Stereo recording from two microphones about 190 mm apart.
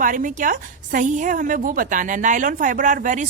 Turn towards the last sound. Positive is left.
turn(degrees=-40)  # may be behind; listen again after turning